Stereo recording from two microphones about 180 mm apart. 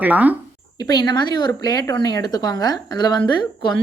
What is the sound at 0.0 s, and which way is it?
Speech, 10° right (ahead or behind).